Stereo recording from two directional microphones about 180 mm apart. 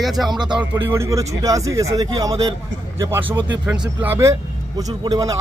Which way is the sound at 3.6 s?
10° right (ahead or behind).